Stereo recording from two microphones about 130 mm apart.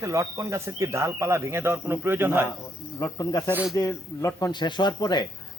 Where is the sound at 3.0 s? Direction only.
30° left (ahead or behind).